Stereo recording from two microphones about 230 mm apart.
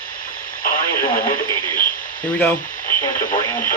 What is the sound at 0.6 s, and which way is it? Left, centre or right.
Radio, left.